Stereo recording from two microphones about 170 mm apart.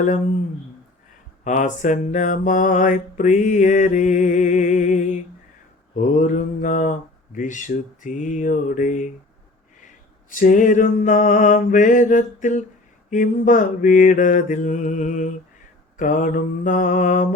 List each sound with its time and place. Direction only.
1.5 s mantra: 45° left (ahead or behind)
9.8 s a sound: 50° left (ahead or behind)
13.1 s mantra: 50° left (ahead or behind)